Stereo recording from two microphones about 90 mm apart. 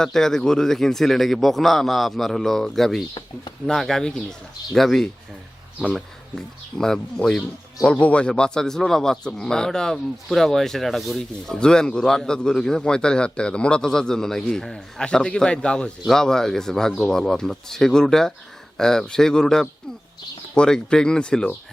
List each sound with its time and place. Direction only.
0.0 s a man's voice: 5° left (ahead or behind)